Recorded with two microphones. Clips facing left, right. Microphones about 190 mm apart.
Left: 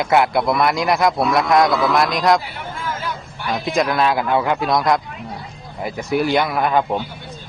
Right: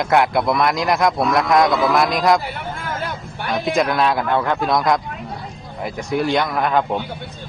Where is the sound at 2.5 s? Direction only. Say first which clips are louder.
Right 1 dB; 55° right (ahead or behind).